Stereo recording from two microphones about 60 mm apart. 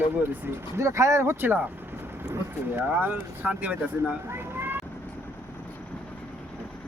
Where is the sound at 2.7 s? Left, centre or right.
Right.